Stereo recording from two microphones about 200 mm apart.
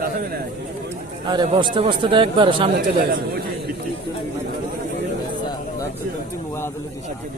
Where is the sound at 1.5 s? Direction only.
25° right (ahead or behind).